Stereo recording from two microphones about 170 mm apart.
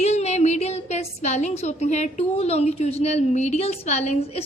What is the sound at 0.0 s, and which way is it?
A woman's voice, 40° left (ahead or behind).